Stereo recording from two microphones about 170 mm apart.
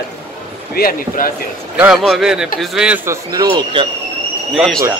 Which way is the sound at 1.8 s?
5° right (ahead or behind).